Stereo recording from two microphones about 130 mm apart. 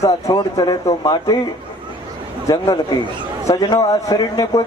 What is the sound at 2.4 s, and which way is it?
Speech, 25° left (ahead or behind).